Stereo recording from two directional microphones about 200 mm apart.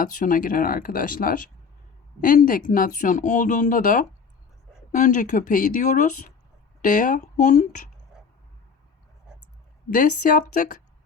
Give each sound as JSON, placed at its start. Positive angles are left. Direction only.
{"t": 0.0, "sound": "speech", "side_deg": 45}
{"t": 9.9, "sound": "speech", "side_deg": 45}